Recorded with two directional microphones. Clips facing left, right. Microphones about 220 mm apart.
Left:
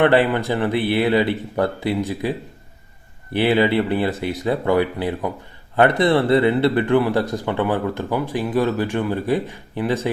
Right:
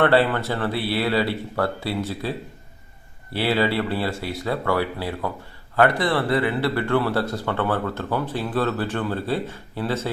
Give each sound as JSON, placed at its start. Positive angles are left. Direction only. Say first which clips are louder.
{"t": 0.0, "sound": "speech", "louder": "left 3 dB", "side_deg": 15}
{"t": 3.3, "sound": "speech", "louder": "left 5 dB", "side_deg": 20}